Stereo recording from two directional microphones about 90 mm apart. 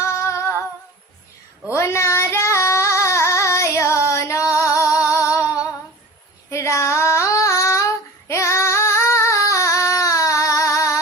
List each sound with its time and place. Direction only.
0.0 s female singing: 35° left (ahead or behind)
1.7 s child singing: 30° left (ahead or behind)
3.8 s female singing: 35° left (ahead or behind)
6.5 s child singing: 35° left (ahead or behind)